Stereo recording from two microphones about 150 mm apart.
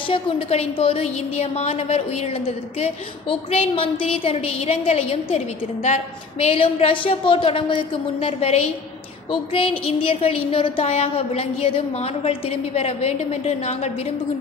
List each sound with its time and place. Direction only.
0.1 s a woman's voice: 40° left (ahead or behind)
6.4 s a woman's voice: 40° left (ahead or behind)